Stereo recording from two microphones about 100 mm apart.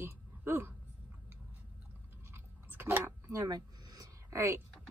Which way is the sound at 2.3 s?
25° right (ahead or behind).